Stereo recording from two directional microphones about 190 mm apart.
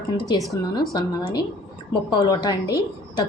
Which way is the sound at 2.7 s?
20° left (ahead or behind).